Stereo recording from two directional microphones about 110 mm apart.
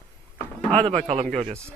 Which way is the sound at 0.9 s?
85° right.